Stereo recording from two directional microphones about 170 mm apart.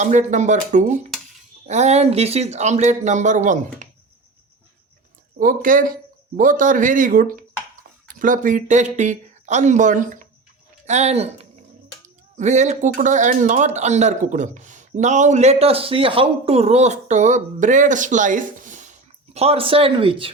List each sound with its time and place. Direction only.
0.0 s speech: 45° right (ahead or behind)
5.4 s speech: 55° right (ahead or behind)
19.3 s speech: 35° right (ahead or behind)